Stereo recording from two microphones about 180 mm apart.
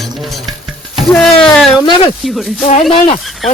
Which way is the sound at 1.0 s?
5° left (ahead or behind).